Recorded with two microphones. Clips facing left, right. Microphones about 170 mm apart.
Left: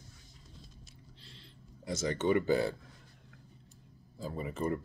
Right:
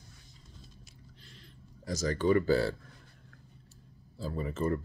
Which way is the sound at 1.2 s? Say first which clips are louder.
Right 1 dB; 30° left (ahead or behind).